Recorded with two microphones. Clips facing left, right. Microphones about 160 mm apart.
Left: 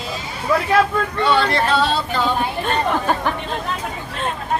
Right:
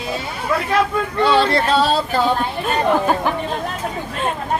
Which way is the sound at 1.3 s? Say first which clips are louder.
Right 3 dB; 30° right (ahead or behind).